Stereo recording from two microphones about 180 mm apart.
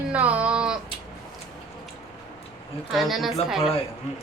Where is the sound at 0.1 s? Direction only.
5° right (ahead or behind).